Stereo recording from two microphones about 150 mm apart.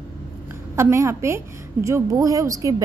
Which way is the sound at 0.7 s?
20° right (ahead or behind).